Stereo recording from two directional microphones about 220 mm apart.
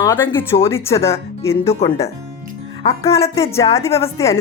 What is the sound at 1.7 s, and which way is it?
Speech, 30° left (ahead or behind).